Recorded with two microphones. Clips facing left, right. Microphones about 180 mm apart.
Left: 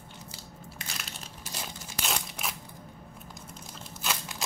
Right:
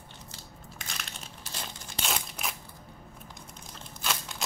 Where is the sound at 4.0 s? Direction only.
5° left (ahead or behind).